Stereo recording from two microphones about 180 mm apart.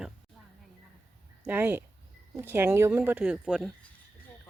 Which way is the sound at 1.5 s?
10° right (ahead or behind).